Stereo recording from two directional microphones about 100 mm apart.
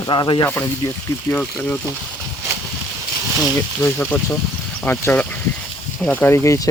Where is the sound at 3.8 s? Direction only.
20° left (ahead or behind).